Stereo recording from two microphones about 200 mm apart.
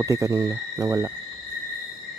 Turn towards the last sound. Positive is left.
turn(degrees=-15)  # may be behind; listen again after turning